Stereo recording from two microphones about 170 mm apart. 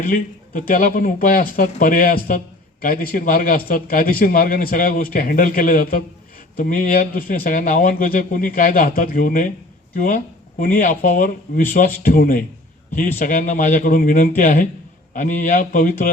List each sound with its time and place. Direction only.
0.0 s a man's voice: 55° left (ahead or behind)